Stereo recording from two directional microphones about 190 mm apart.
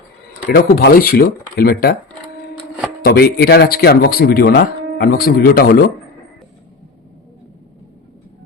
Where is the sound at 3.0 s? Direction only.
55° left (ahead or behind).